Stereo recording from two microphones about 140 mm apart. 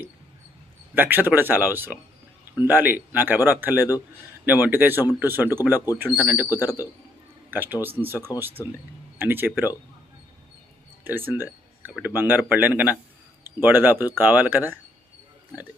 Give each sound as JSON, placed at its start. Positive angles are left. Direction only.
{"t": 0.9, "sound": "speech", "side_deg": -15}
{"t": 11.0, "sound": "speech", "side_deg": -15}